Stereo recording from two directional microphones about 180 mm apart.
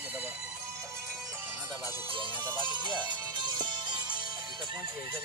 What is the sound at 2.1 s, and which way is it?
Music, 25° right (ahead or behind).